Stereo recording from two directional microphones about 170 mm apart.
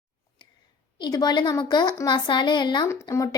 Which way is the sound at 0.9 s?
25° left (ahead or behind).